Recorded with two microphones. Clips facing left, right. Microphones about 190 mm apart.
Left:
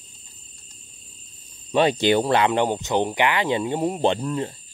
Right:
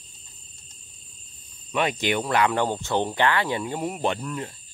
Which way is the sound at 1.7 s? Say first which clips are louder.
Left 6 dB; 30° left (ahead or behind).